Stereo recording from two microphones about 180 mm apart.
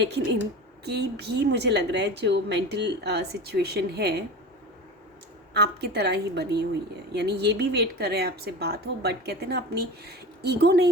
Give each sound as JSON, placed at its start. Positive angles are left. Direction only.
{"t": 0.9, "sound": "a woman's voice", "side_deg": -65}
{"t": 5.5, "sound": "a woman's voice", "side_deg": -65}